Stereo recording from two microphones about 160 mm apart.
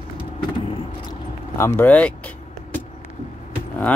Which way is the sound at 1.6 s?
10° left (ahead or behind).